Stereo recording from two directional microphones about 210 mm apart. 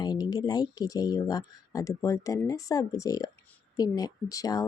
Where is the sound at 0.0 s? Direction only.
20° left (ahead or behind).